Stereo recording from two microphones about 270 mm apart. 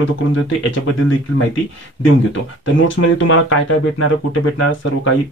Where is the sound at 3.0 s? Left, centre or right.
Left.